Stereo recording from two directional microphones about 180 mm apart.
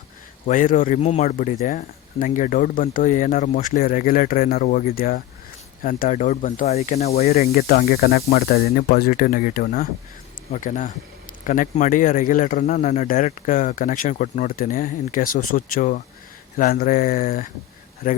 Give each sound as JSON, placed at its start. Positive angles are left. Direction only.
{"t": 0.4, "sound": "speech", "side_deg": 50}
{"t": 7.5, "sound": "speech", "side_deg": 55}